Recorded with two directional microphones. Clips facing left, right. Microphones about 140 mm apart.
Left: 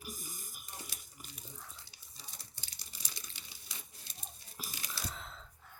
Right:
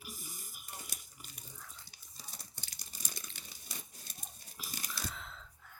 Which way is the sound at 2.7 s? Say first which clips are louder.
Right 3 dB; 50° right (ahead or behind).